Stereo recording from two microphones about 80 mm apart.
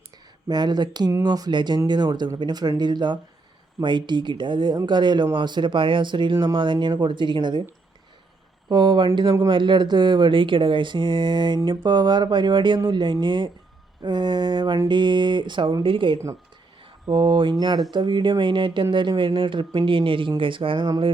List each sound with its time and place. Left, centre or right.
0.4 s speech: right
8.7 s speech: right
9.5 s speech: right
16.8 s speech: right